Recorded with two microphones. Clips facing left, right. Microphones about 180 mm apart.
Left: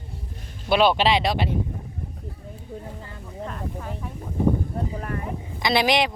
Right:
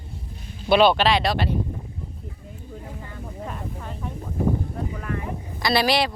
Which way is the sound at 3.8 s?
5° left (ahead or behind).